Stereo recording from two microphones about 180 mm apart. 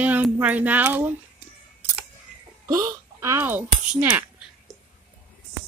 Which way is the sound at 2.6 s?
20° right (ahead or behind).